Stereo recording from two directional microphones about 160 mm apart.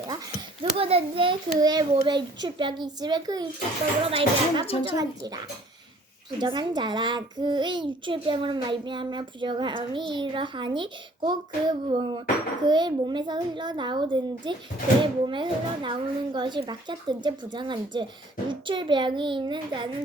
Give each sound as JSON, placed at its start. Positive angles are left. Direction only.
{"t": 0.6, "sound": "a child's voice", "side_deg": -35}
{"t": 4.0, "sound": "speech", "side_deg": -35}
{"t": 4.9, "sound": "a child's voice", "side_deg": -25}
{"t": 6.4, "sound": "a child's voice", "side_deg": -30}